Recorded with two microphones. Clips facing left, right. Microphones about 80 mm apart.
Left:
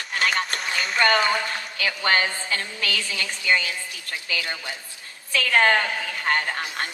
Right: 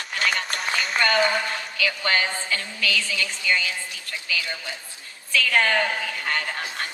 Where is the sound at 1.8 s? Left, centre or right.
Left.